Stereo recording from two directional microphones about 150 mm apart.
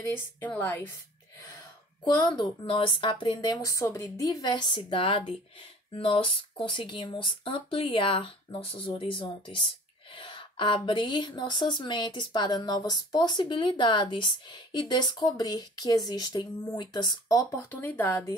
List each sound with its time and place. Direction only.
0.0 s a woman's voice: 15° left (ahead or behind)
2.1 s speech: 30° left (ahead or behind)
3.3 s a woman's voice: 20° left (ahead or behind)
17.7 s a woman's voice: 10° left (ahead or behind)